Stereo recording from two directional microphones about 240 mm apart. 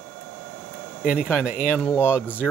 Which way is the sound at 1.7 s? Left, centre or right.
Centre.